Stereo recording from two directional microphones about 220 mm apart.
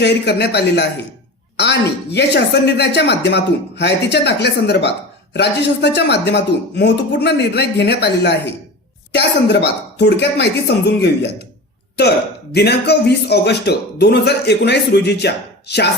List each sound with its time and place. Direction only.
0.0 s speech: 50° left (ahead or behind)
12.5 s speech: 50° left (ahead or behind)